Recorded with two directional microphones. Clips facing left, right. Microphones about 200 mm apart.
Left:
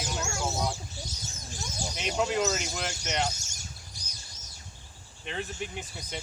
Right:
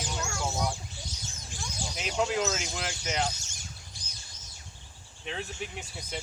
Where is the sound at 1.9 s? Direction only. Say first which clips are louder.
Left 1 dB; centre (ahead or behind).